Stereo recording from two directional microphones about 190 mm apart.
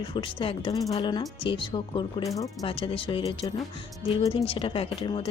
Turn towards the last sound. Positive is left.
turn(degrees=25)  # may be behind; listen again after turning